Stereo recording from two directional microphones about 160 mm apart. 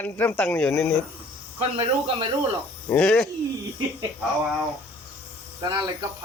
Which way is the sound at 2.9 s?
5° left (ahead or behind).